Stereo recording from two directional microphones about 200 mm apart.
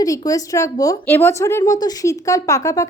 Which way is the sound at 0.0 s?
15° left (ahead or behind).